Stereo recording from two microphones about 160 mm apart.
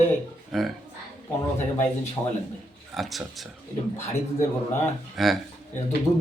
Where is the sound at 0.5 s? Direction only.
Centre (ahead or behind).